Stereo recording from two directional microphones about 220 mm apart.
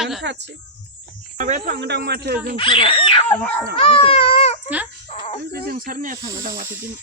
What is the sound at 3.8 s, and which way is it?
Baby cry, 25° left (ahead or behind).